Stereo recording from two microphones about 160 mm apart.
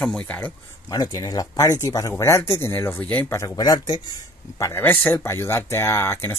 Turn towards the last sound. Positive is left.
turn(degrees=15)  # may be behind; listen again after turning